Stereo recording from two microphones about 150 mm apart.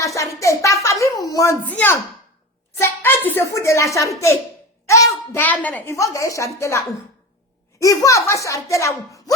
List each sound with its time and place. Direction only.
0.0 s a woman's voice: 20° left (ahead or behind)
1.6 s a child's voice: 10° left (ahead or behind)